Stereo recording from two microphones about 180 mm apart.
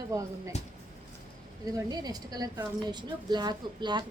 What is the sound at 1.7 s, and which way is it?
A woman's voice, 20° right (ahead or behind).